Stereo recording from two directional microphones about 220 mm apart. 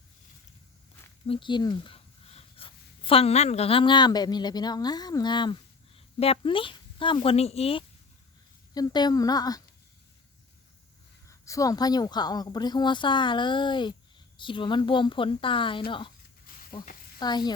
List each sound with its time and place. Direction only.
1.3 s a woman's voice: 20° left (ahead or behind)
11.3 s a woman's voice: 15° left (ahead or behind)
16.5 s sizzle: 40° left (ahead or behind)
17.2 s a woman's voice: 20° left (ahead or behind)